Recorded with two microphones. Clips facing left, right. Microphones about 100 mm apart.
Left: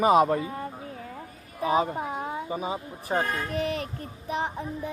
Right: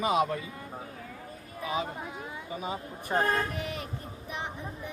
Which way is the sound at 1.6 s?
40° left (ahead or behind).